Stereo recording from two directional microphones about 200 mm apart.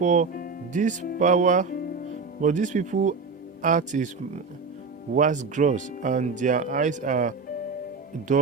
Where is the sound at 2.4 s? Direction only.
40° right (ahead or behind).